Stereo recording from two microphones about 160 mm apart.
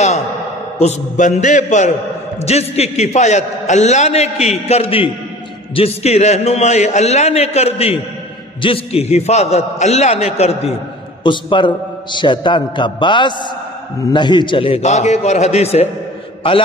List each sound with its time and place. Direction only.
0.7 s a man's voice: 45° left (ahead or behind)
11.2 s a man's voice: 30° left (ahead or behind)